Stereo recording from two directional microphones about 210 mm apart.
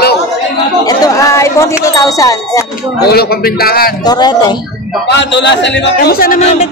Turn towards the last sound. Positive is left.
turn(degrees=30)  # may be behind; listen again after turning